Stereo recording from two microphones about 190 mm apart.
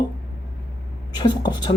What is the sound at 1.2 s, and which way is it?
Speech, 20° left (ahead or behind).